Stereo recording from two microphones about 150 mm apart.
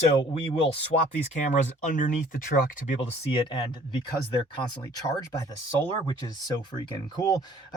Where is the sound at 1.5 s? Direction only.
55° left (ahead or behind).